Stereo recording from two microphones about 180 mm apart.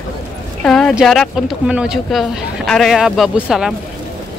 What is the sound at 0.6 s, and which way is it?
Speech, 5° left (ahead or behind).